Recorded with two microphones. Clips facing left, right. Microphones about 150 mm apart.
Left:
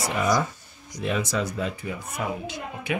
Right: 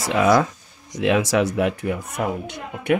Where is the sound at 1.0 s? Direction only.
90° right.